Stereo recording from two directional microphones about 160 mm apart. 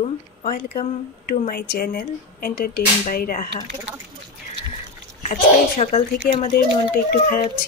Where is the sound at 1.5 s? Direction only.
70° left (ahead or behind).